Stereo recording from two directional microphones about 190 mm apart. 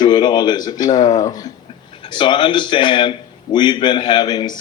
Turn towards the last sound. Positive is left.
turn(degrees=20)  # may be behind; listen again after turning